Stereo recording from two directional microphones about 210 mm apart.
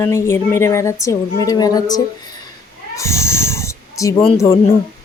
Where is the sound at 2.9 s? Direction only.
15° left (ahead or behind).